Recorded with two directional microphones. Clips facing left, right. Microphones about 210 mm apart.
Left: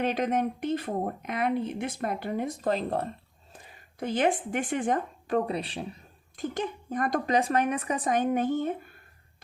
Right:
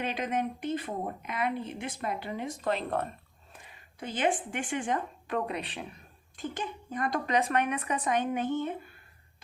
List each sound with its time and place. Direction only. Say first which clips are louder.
0.0 s a woman's voice: left 5 dB; 45° left (ahead or behind)
2.5 s speech: even; 35° left (ahead or behind)
4.0 s a woman's voice: left 4 dB; 50° left (ahead or behind)
5.5 s speech: left 4 dB; 35° left (ahead or behind)
6.3 s a woman's voice: left 5 dB; 50° left (ahead or behind)
7.3 s speech: left 2 dB; 35° left (ahead or behind)